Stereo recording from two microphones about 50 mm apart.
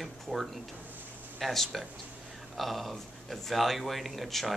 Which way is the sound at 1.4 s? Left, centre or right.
Centre.